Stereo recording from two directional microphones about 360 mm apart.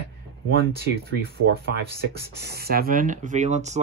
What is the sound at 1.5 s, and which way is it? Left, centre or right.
Speech, right.